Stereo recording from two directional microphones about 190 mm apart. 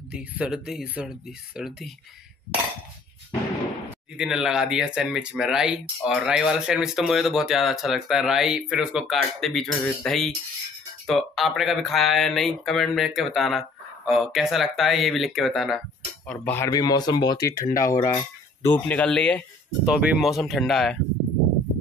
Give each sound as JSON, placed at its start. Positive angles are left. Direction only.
{"t": 0.1, "sound": "speech", "side_deg": -5}
{"t": 4.2, "sound": "speech", "side_deg": -5}
{"t": 16.3, "sound": "speech", "side_deg": 10}